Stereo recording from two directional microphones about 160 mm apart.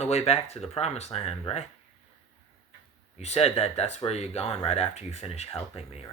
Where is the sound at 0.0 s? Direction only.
40° left (ahead or behind).